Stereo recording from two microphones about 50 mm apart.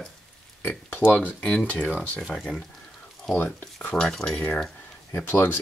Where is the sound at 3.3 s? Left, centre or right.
Left.